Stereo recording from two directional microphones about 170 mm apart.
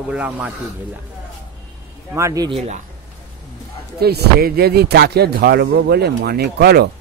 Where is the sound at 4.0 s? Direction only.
70° right (ahead or behind).